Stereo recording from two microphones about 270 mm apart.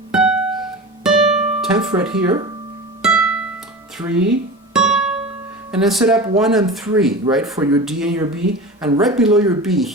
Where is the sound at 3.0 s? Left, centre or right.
Centre.